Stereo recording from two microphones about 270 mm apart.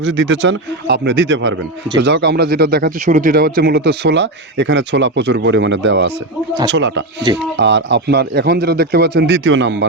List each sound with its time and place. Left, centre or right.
0.0 s speech: right